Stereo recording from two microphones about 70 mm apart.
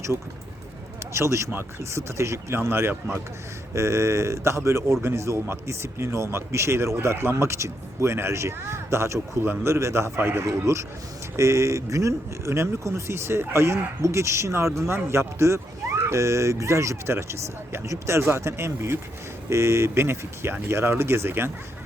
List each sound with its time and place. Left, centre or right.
1.1 s a man's voice: right